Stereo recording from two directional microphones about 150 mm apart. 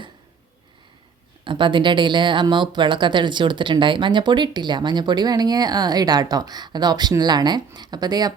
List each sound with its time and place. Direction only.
1.5 s speech: 30° right (ahead or behind)